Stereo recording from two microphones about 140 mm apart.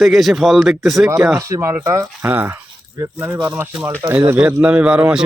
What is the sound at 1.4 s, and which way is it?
Speech, 20° right (ahead or behind).